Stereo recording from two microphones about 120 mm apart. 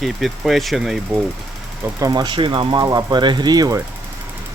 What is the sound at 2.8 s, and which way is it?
Speech, 30° right (ahead or behind).